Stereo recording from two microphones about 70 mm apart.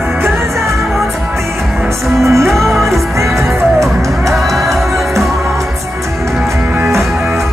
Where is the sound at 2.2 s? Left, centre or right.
Right.